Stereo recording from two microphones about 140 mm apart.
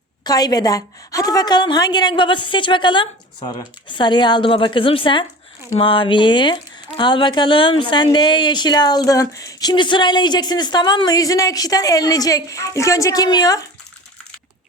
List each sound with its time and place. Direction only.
0.3 s a woman's voice: 30° left (ahead or behind)